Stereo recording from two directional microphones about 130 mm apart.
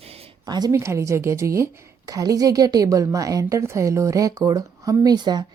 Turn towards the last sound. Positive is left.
turn(degrees=-30)  # may be behind; listen again after turning